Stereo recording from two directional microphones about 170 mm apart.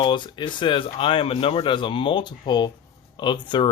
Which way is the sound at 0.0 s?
25° left (ahead or behind).